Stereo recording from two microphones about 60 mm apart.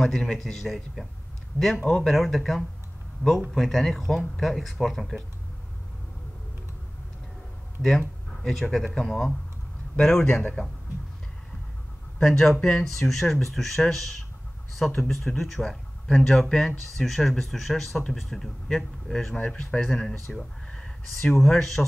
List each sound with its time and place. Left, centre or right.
0.0 s speech: centre
2.0 s speech: centre
8.4 s speech: centre
12.2 s speech: centre
19.3 s speech: centre
19.9 s speech: centre